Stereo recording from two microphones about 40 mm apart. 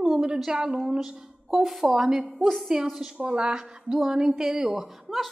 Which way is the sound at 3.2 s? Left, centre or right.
Right.